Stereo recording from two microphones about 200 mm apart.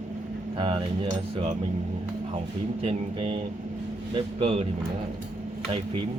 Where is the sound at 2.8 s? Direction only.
30° right (ahead or behind).